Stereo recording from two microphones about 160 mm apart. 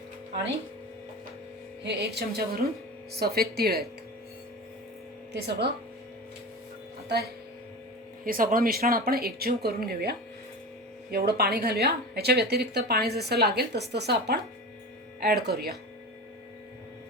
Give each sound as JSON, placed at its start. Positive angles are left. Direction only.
{"t": 1.8, "sound": "speech", "side_deg": -90}
{"t": 5.3, "sound": "speech", "side_deg": -90}
{"t": 8.2, "sound": "speech", "side_deg": -60}